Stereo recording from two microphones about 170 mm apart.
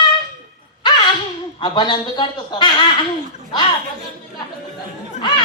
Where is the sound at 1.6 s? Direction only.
25° left (ahead or behind).